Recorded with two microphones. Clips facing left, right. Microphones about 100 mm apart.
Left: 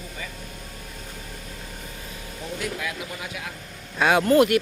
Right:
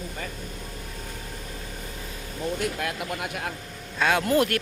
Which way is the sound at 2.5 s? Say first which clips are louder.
Left 2 dB; 55° right (ahead or behind).